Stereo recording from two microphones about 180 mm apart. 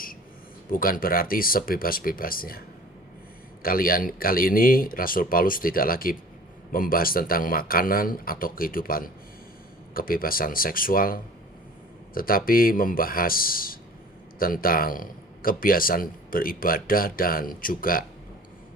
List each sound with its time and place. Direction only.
0.7 s a man's voice: 55° left (ahead or behind)